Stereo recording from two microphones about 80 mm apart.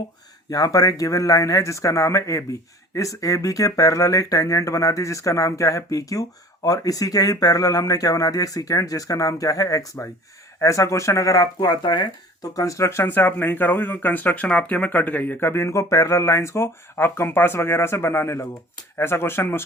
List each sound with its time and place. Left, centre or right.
0.5 s speech: left
12.5 s speech: left
13.1 s speech: left